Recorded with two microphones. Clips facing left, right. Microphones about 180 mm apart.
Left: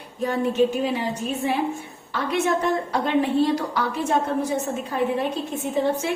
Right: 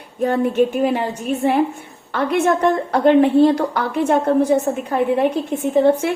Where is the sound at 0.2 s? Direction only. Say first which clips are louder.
Right 4 dB; 55° right (ahead or behind).